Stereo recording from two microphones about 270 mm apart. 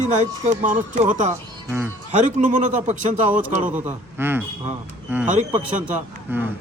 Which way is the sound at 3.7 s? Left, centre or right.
Centre.